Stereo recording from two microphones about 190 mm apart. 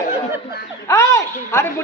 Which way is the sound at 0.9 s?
15° left (ahead or behind).